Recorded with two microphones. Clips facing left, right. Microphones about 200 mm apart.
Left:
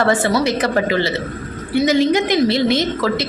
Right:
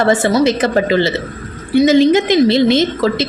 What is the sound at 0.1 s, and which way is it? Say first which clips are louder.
A woman's voice: right 4 dB; 20° right (ahead or behind).